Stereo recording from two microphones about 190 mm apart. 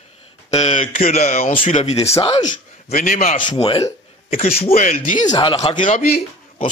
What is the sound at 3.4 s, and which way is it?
Speech, 25° left (ahead or behind).